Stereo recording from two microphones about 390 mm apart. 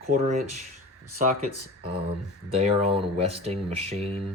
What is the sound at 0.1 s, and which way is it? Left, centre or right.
Speech, centre.